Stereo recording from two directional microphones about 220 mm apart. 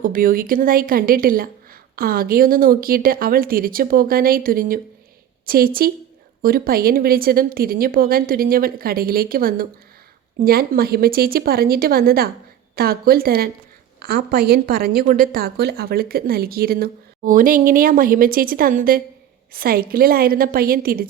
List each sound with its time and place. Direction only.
0.0 s a woman's voice: 40° right (ahead or behind)